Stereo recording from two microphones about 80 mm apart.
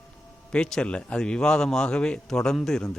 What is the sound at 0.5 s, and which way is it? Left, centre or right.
Speech, centre.